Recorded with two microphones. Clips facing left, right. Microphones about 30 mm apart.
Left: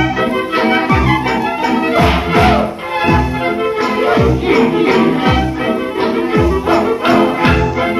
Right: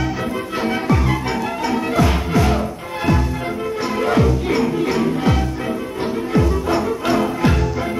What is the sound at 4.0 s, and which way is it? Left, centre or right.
Music, left.